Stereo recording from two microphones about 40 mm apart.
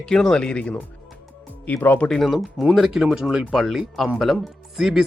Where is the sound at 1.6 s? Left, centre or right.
Left.